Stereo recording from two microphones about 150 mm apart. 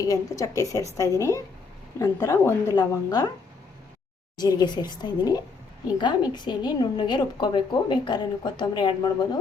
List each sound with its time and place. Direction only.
0.0 s a woman's voice: 20° left (ahead or behind)
4.4 s a woman's voice: 25° left (ahead or behind)